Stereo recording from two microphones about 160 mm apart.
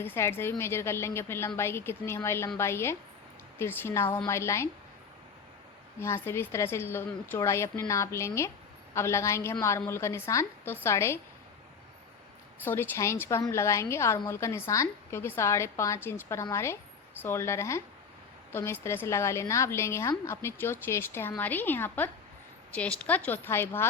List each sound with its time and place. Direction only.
0.0 s a woman's voice: 15° left (ahead or behind)
6.0 s a woman's voice: 15° left (ahead or behind)
12.6 s a woman's voice: 15° left (ahead or behind)